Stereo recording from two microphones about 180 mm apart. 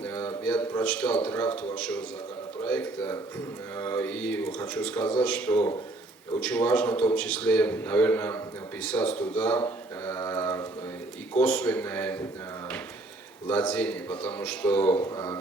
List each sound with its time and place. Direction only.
0.0 s a man's voice: 10° left (ahead or behind)
8.9 s a sound: 10° left (ahead or behind)
11.3 s speech: 10° left (ahead or behind)
13.5 s speech: 10° left (ahead or behind)